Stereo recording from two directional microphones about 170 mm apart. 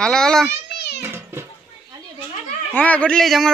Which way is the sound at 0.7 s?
75° left (ahead or behind).